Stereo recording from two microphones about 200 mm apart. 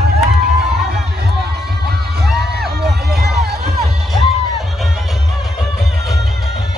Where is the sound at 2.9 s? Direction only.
55° right (ahead or behind).